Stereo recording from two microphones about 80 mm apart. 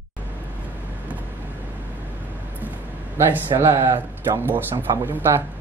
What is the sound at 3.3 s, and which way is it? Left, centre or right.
Speech, right.